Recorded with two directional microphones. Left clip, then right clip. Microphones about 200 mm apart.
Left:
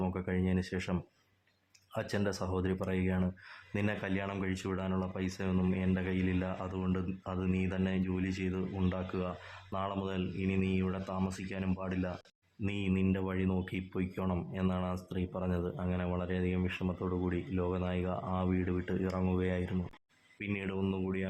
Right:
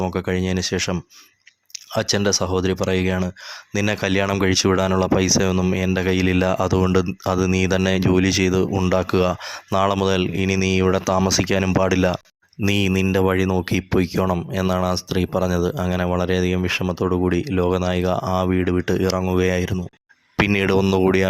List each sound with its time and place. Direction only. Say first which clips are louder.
0.0 s speech: right 13 dB; 35° right (ahead or behind)
20.5 s speech: right 17 dB; 45° right (ahead or behind)